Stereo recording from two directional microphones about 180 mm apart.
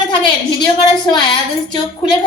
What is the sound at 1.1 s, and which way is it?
Speech, 25° left (ahead or behind).